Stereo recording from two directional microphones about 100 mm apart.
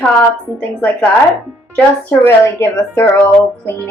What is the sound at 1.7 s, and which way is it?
Speech, 20° left (ahead or behind).